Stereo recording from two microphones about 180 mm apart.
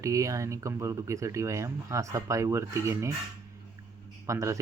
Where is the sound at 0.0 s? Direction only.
20° right (ahead or behind).